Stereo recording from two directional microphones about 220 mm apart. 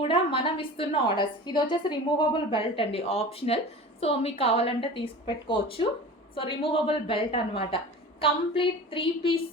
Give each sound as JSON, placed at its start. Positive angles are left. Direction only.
{"t": 0.0, "sound": "a woman's voice", "side_deg": 25}